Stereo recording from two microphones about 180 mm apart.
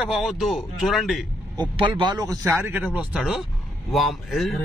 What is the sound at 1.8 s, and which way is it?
Speech, 25° right (ahead or behind).